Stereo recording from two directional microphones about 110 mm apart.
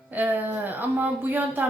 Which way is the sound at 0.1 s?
15° right (ahead or behind).